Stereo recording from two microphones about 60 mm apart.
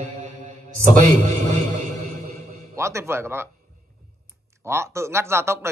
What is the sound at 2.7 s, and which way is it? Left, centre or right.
Speech, right.